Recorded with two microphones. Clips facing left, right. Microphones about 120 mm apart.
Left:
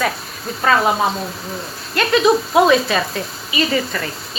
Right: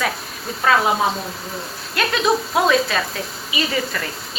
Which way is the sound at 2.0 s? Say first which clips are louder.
Left 5 dB; 5° left (ahead or behind).